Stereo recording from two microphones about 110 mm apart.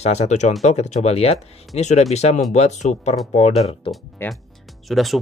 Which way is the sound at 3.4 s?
75° left (ahead or behind).